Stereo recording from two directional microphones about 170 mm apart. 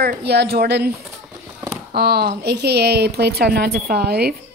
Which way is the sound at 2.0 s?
65° right (ahead or behind).